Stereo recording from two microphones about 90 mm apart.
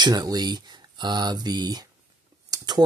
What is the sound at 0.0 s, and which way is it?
Speech, 45° right (ahead or behind).